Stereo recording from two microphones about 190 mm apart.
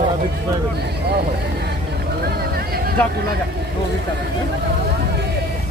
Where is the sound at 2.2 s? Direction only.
55° right (ahead or behind).